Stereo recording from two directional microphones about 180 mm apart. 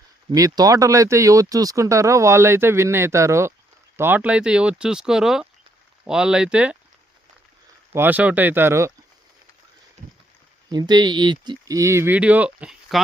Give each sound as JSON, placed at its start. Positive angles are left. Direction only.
{"t": 0.3, "sound": "speech", "side_deg": -20}
{"t": 7.9, "sound": "speech", "side_deg": -10}
{"t": 10.7, "sound": "speech", "side_deg": -25}